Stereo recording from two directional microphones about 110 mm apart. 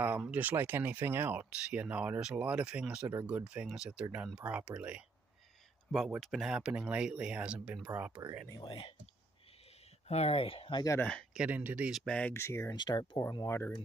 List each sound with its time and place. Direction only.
0.0 s speech: 15° right (ahead or behind)
10.0 s speech: 70° left (ahead or behind)
11.0 s speech: 10° left (ahead or behind)
11.3 s speech: 15° right (ahead or behind)
11.9 s speech: centre (ahead or behind)
12.4 s speech: 25° left (ahead or behind)
12.7 s speech: 40° left (ahead or behind)
13.2 s speech: 30° left (ahead or behind)